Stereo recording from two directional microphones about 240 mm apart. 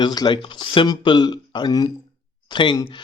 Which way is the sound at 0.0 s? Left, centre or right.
Centre.